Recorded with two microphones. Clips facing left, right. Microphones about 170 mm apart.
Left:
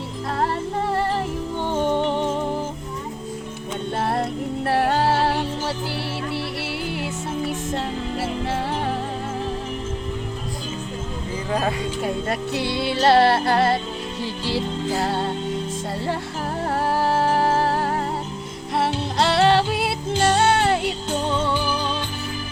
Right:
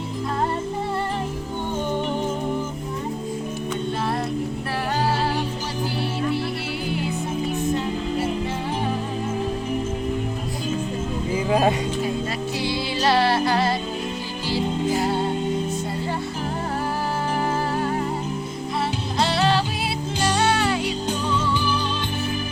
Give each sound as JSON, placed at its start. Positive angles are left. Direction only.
{"t": 1.7, "sound": "music", "side_deg": 75}
{"t": 2.0, "sound": "music", "side_deg": 30}
{"t": 4.7, "sound": "music", "side_deg": 60}
{"t": 12.5, "sound": "music", "side_deg": 60}
{"t": 17.0, "sound": "music", "side_deg": 75}